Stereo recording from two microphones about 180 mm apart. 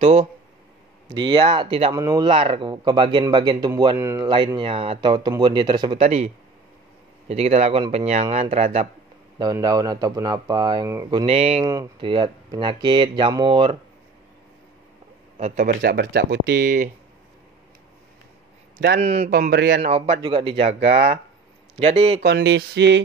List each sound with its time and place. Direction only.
0.0 s speech: 40° right (ahead or behind)
1.1 s speech: 25° right (ahead or behind)
2.0 s speech: 20° right (ahead or behind)
4.6 s speech: 30° right (ahead or behind)
6.0 s speech: 35° right (ahead or behind)
9.4 s speech: 20° right (ahead or behind)
11.1 s speech: 30° right (ahead or behind)
15.3 s speech: 40° right (ahead or behind)
15.8 s speech: 65° right (ahead or behind)
18.9 s speech: 35° right (ahead or behind)
19.3 s a sound: 65° right (ahead or behind)
19.8 s speech: 35° right (ahead or behind)
22.2 s a sound: 70° right (ahead or behind)